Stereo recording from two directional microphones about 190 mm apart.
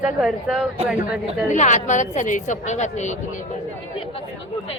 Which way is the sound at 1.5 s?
40° left (ahead or behind).